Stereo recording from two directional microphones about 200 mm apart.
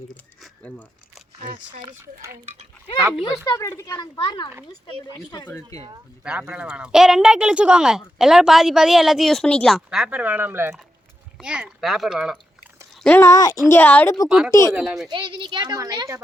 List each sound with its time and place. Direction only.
0.4 s a sound: 5° left (ahead or behind)
3.0 s speech: 10° right (ahead or behind)
3.4 s speech: 15° left (ahead or behind)
5.5 s speech: 15° left (ahead or behind)
6.2 s speech: 5° right (ahead or behind); by 14.3 s 10° left (ahead or behind)
14.3 s speech: 5° right (ahead or behind)
15.1 s speech: 25° right (ahead or behind)